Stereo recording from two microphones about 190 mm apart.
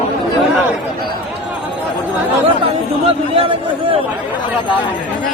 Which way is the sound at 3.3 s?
30° right (ahead or behind).